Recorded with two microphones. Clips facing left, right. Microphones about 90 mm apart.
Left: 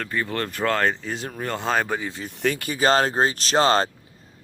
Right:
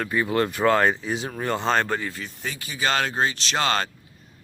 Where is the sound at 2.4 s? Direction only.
55° left (ahead or behind); by 3.9 s 35° left (ahead or behind).